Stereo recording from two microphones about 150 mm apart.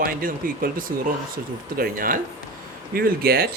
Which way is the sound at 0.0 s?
70° right (ahead or behind).